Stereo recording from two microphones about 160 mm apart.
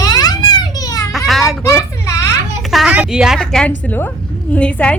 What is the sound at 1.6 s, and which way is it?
Child singing, 20° left (ahead or behind).